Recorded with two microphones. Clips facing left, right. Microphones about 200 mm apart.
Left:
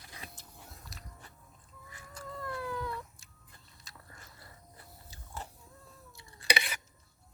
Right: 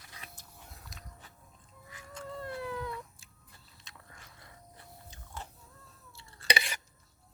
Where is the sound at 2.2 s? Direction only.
25° right (ahead or behind).